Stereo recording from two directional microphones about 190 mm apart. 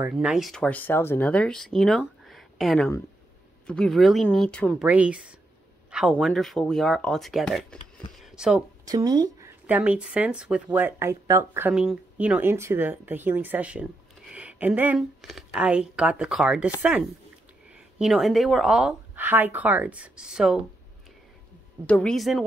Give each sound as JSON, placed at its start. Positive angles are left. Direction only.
{"t": 0.0, "sound": "speech", "side_deg": -5}
{"t": 4.8, "sound": "speech", "side_deg": -5}
{"t": 8.8, "sound": "speech", "side_deg": -20}
{"t": 9.7, "sound": "a woman's voice", "side_deg": -10}
{"t": 21.8, "sound": "speech", "side_deg": 5}